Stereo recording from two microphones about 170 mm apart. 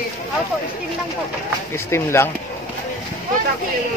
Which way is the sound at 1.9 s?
15° left (ahead or behind).